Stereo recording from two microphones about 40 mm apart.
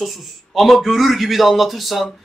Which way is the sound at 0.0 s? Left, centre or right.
Centre.